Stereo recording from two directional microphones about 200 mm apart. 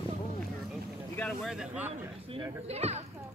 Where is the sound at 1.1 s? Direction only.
5° left (ahead or behind).